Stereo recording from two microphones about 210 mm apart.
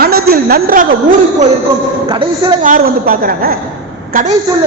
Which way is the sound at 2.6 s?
40° right (ahead or behind).